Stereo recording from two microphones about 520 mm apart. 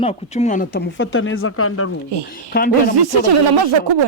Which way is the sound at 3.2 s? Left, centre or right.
Right.